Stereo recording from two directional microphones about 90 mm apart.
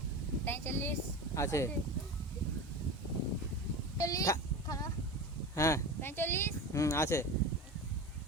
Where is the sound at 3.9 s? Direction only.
40° left (ahead or behind).